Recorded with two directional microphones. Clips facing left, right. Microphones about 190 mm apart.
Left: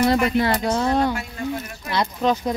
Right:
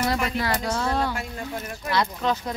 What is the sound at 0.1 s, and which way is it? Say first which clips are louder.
Speech: left 6 dB; 25° left (ahead or behind).